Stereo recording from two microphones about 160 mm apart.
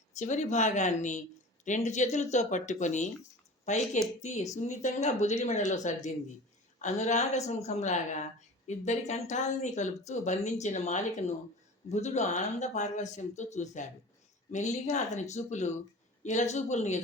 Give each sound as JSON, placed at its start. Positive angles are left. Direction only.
{"t": 0.2, "sound": "a woman's voice", "side_deg": 50}